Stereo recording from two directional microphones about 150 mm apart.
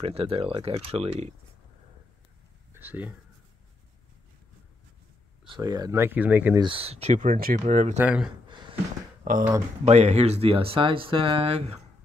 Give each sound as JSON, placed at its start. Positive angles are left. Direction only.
{"t": 0.0, "sound": "speech", "side_deg": -40}
{"t": 2.7, "sound": "speech", "side_deg": -10}
{"t": 5.4, "sound": "speech", "side_deg": -30}
{"t": 6.5, "sound": "speech", "side_deg": -35}
{"t": 8.0, "sound": "speech", "side_deg": -10}
{"t": 8.5, "sound": "a sound", "side_deg": -30}
{"t": 9.3, "sound": "speech", "side_deg": -70}
{"t": 9.8, "sound": "speech", "side_deg": -45}